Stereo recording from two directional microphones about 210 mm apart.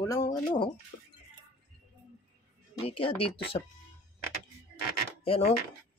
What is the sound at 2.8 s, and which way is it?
Speech, 25° left (ahead or behind).